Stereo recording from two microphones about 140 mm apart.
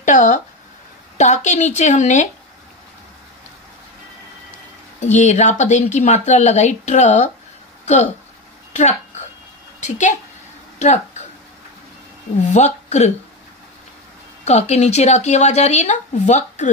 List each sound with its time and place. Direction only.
0.0 s a woman's voice: 65° left (ahead or behind)
5.0 s speech: 55° left (ahead or behind)
8.7 s a sound: 55° left (ahead or behind)
9.8 s a woman's voice: 60° left (ahead or behind)
10.8 s a sound: 60° left (ahead or behind)
12.5 s speech: 55° left (ahead or behind)
14.4 s speech: 50° left (ahead or behind)